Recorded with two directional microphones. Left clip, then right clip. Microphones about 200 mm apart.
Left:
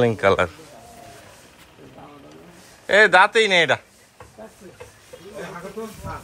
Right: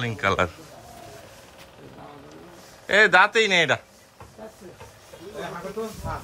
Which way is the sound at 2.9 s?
15° right (ahead or behind).